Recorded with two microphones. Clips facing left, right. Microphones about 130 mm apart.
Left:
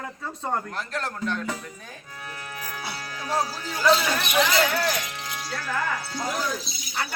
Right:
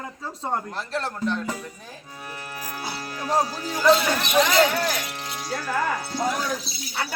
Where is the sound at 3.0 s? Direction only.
40° right (ahead or behind).